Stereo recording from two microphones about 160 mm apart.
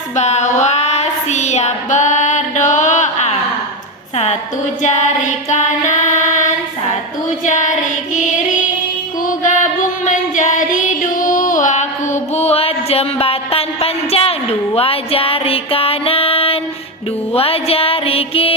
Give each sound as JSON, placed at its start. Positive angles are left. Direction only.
{"t": 0.2, "sound": "child singing", "side_deg": 45}
{"t": 4.8, "sound": "music", "side_deg": 50}
{"t": 7.4, "sound": "child singing", "side_deg": 50}
{"t": 9.2, "sound": "music", "side_deg": 50}